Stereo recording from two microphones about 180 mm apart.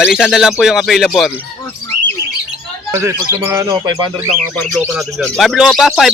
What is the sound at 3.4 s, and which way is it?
Speech, 15° right (ahead or behind).